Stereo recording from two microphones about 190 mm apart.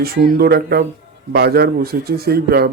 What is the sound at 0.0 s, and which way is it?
A man's voice, 55° right (ahead or behind).